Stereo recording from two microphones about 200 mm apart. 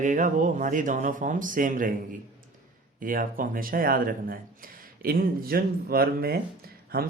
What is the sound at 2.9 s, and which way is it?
Speech, 45° right (ahead or behind).